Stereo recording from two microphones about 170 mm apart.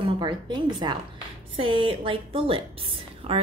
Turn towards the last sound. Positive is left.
turn(degrees=-35)  # may be behind; listen again after turning